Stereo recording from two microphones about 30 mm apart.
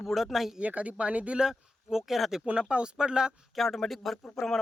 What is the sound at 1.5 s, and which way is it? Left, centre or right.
Speech, centre.